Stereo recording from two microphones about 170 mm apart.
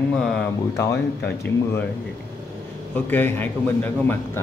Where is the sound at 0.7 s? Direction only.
20° left (ahead or behind).